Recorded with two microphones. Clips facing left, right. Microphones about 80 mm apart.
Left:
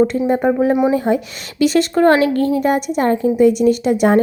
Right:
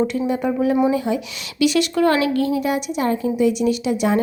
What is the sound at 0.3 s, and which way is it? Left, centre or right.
A woman's voice, left.